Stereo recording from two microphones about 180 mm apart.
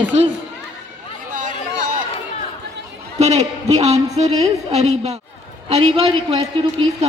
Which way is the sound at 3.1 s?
40° right (ahead or behind).